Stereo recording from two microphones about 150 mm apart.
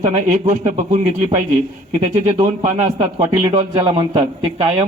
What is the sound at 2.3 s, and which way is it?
A man's voice, 50° right (ahead or behind).